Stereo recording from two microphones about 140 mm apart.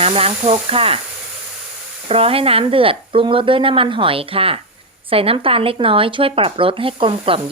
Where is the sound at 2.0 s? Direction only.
45° right (ahead or behind).